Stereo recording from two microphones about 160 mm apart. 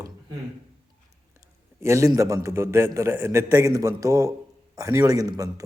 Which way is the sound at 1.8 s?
20° right (ahead or behind).